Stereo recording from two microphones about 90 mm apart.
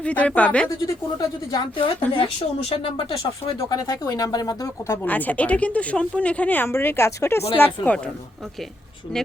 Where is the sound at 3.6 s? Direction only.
40° left (ahead or behind).